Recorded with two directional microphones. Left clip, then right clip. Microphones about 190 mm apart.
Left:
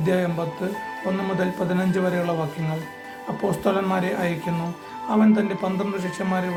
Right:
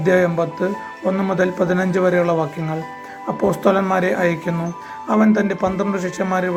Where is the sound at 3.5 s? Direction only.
20° right (ahead or behind).